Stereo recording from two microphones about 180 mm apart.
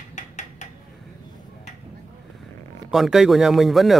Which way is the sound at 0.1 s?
40° left (ahead or behind).